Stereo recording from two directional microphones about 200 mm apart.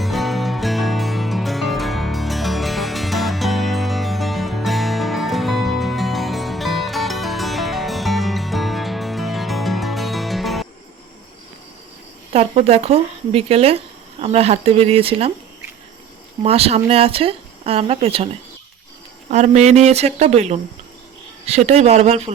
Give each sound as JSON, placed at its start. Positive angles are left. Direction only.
{"t": 0.0, "sound": "music", "side_deg": 0}
{"t": 12.3, "sound": "speech", "side_deg": -30}
{"t": 16.4, "sound": "speech", "side_deg": -30}
{"t": 19.3, "sound": "speech", "side_deg": -35}